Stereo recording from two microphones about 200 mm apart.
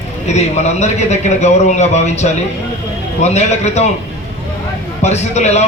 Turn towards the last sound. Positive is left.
turn(degrees=35)  # may be behind; listen again after turning